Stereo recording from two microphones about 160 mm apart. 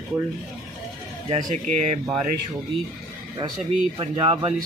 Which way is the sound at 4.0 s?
30° right (ahead or behind).